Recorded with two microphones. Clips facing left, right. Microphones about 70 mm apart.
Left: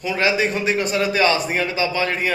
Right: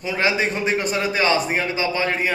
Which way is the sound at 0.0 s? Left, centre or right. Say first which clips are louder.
Left 1 dB; right.